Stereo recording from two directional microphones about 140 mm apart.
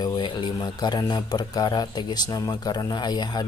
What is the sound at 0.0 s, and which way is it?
A man's voice, 30° left (ahead or behind).